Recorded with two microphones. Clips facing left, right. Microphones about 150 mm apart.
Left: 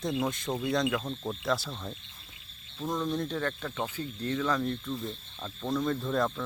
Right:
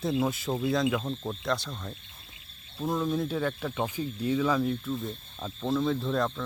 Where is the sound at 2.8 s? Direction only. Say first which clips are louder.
Right 3 dB; 5° right (ahead or behind).